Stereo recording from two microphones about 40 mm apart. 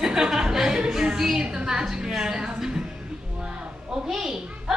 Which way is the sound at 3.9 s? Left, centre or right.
Centre.